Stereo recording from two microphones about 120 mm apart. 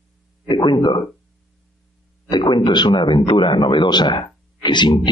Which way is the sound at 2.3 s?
35° left (ahead or behind).